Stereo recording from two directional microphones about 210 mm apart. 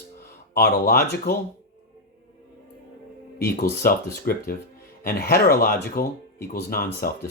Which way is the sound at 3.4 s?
45° left (ahead or behind).